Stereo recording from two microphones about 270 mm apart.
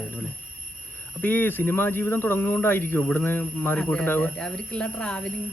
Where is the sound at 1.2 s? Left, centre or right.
Centre.